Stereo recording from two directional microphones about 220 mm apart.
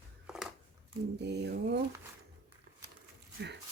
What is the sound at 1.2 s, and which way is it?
Speech, 50° right (ahead or behind).